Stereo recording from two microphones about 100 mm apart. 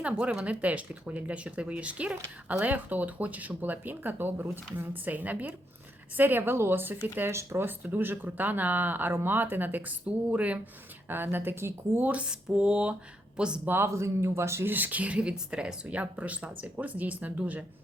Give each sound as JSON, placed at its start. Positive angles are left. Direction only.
{"t": 0.0, "sound": "speech", "side_deg": -10}
{"t": 13.7, "sound": "speech", "side_deg": -25}